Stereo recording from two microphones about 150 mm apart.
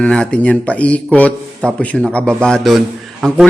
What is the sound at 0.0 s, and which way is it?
A man's voice, 5° left (ahead or behind).